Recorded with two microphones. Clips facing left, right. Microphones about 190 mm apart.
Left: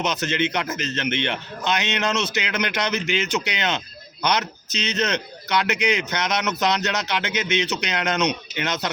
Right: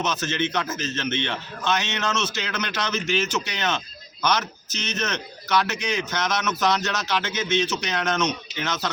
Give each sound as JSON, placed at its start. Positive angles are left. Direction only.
{"t": 0.0, "sound": "a man's voice", "side_deg": 15}